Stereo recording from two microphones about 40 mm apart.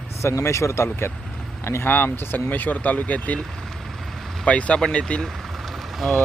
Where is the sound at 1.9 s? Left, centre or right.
Left.